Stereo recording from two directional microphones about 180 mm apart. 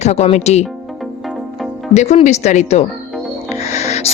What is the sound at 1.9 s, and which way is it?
Speech, 40° left (ahead or behind).